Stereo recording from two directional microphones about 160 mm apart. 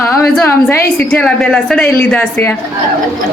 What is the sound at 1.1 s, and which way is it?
A woman's voice, 5° left (ahead or behind).